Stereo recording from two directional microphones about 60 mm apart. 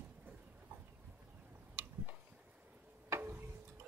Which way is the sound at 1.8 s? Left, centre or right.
Right.